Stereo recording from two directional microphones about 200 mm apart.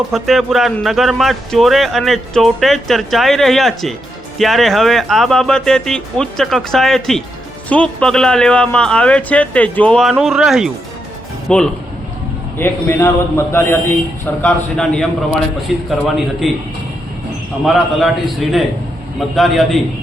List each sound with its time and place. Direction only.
0.1 s a man's voice: centre (ahead or behind)
17.7 s a man's voice: centre (ahead or behind)